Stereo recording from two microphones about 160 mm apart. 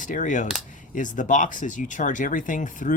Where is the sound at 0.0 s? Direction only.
50° left (ahead or behind).